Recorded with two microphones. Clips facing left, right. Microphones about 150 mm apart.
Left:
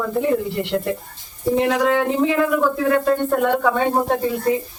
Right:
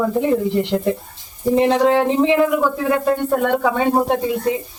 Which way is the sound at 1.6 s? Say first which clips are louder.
Right 4 dB; 30° right (ahead or behind).